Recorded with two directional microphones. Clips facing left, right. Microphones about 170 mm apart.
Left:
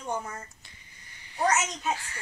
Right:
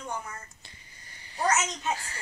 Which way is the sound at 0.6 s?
30° right (ahead or behind).